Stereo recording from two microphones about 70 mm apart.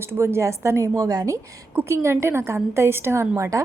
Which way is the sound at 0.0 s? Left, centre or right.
Right.